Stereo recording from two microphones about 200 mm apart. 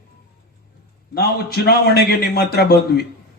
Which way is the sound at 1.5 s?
50° left (ahead or behind).